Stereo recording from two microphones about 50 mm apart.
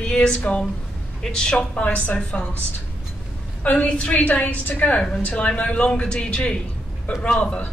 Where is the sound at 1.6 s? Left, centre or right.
Left.